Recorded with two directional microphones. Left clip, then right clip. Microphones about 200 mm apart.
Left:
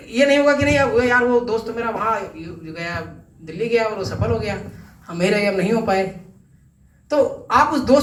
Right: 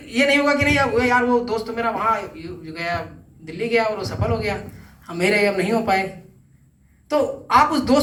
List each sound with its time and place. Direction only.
0.1 s a man's voice: 20° right (ahead or behind)
7.1 s a man's voice: 20° right (ahead or behind)